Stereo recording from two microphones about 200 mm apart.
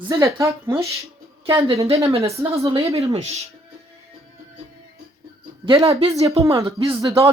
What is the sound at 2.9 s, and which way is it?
Speech, 30° right (ahead or behind).